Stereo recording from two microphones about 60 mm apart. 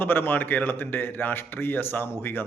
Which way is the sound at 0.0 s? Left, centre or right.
Left.